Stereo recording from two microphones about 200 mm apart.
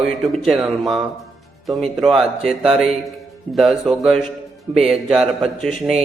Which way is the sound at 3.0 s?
Centre (ahead or behind).